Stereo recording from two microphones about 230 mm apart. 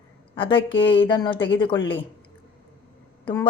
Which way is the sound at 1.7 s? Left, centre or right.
Left.